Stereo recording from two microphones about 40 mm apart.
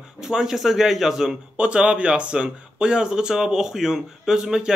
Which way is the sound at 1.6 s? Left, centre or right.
Right.